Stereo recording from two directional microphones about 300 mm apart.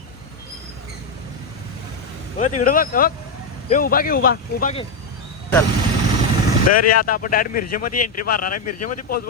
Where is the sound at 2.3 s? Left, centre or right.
Left.